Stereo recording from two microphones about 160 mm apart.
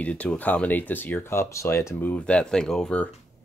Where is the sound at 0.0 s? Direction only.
10° left (ahead or behind).